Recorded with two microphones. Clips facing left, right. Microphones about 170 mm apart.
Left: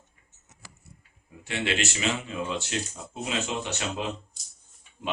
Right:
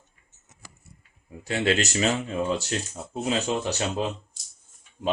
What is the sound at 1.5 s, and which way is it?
Speech, 40° right (ahead or behind).